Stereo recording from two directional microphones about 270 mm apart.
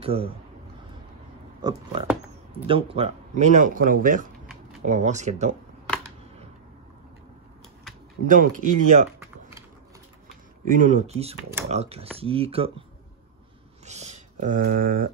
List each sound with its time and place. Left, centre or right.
0.0 s a man's voice: right
1.6 s speech: centre
8.3 s speech: right
10.6 s speech: right
13.8 s speech: right